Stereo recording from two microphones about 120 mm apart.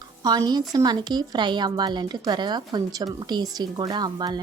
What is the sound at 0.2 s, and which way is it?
A woman's voice, 35° right (ahead or behind).